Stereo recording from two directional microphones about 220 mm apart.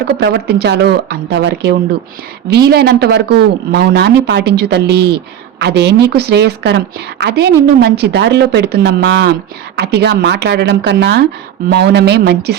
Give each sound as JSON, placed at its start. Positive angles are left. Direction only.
{"t": 0.2, "sound": "speech", "side_deg": -50}